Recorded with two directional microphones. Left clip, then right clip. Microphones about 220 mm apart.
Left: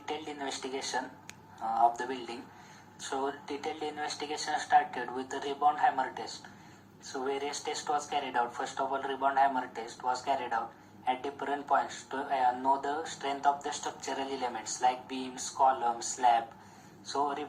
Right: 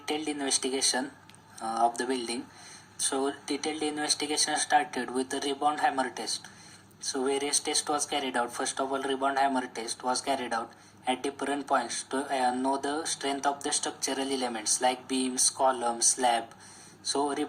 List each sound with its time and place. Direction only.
0.0 s speech: 30° right (ahead or behind)